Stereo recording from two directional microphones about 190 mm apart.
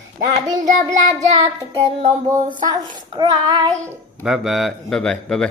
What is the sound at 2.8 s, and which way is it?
Child singing, 25° right (ahead or behind).